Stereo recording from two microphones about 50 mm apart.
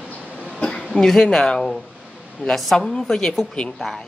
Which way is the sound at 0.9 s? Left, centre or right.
Centre.